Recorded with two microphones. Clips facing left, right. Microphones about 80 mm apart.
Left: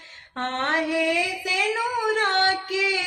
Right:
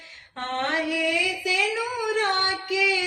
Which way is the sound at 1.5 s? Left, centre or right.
Left.